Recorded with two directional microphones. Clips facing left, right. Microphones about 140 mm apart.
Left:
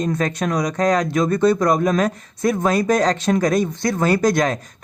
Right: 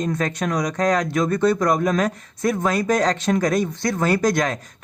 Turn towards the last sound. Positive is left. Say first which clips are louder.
# left 2 dB
turn(degrees=30)  # may be behind; listen again after turning